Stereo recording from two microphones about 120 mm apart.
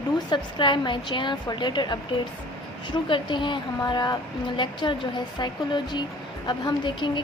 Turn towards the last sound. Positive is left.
turn(degrees=40)  # may be behind; listen again after turning